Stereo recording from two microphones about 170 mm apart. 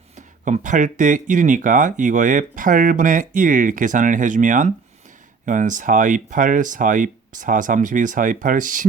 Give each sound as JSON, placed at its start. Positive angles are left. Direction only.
{"t": 0.2, "sound": "speech", "side_deg": -45}